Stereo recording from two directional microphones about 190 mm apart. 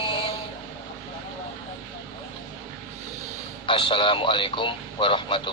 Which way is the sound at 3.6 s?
25° left (ahead or behind).